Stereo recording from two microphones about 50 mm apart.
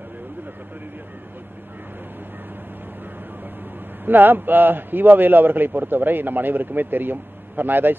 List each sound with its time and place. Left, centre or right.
4.0 s a man's voice: right